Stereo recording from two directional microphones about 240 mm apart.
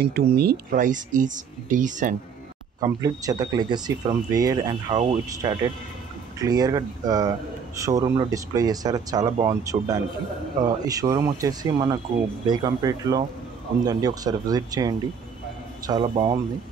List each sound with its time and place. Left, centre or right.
0.0 s speech: right
3.0 s speech: centre